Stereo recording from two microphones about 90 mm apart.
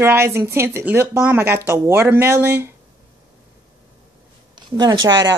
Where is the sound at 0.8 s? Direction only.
15° right (ahead or behind).